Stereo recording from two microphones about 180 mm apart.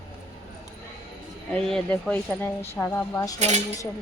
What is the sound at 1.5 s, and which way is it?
Speech, 5° left (ahead or behind).